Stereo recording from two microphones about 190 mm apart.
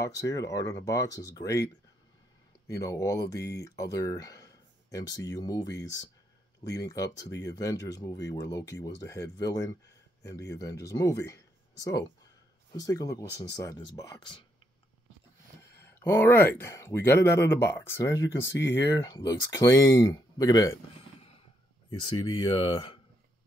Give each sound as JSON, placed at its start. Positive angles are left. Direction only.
{"t": 0.0, "sound": "speech", "side_deg": 20}
{"t": 2.7, "sound": "speech", "side_deg": 15}
{"t": 15.8, "sound": "speech", "side_deg": 10}
{"t": 22.0, "sound": "speech", "side_deg": 30}